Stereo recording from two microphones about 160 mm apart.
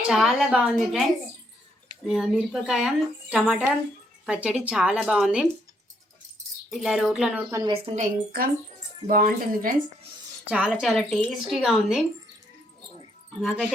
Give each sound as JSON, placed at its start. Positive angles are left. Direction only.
{"t": 0.1, "sound": "speech", "side_deg": 0}
{"t": 2.0, "sound": "speech", "side_deg": -5}
{"t": 6.7, "sound": "speech", "side_deg": 0}
{"t": 7.7, "sound": "a woman's voice", "side_deg": -35}
{"t": 8.0, "sound": "speech", "side_deg": -65}
{"t": 10.5, "sound": "speech", "side_deg": -5}